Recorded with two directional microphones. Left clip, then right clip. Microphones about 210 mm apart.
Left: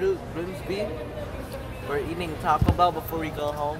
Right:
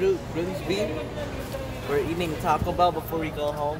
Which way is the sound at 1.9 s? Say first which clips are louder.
Right 3 dB; 10° right (ahead or behind).